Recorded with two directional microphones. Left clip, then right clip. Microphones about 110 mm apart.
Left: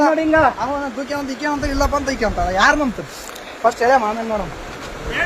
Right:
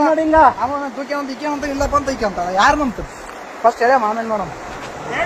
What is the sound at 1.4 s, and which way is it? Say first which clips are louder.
A man's voice: left 3 dB; 15° right (ahead or behind).